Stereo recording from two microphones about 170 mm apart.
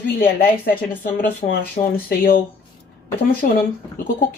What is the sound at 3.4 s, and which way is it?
Speech, 55° left (ahead or behind).